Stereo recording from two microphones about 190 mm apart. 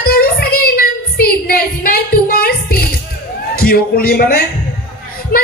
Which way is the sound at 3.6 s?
55° left (ahead or behind).